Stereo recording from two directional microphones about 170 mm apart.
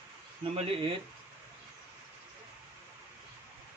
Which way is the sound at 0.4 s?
35° right (ahead or behind).